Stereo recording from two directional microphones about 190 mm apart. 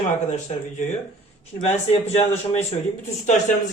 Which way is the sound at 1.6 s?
35° left (ahead or behind).